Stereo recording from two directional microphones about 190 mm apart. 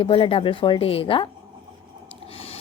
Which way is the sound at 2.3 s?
30° left (ahead or behind).